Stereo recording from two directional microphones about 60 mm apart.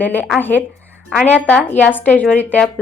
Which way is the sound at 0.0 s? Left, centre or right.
Left.